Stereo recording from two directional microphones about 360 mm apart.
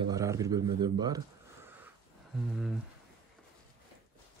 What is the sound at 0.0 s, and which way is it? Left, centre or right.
Speech, centre.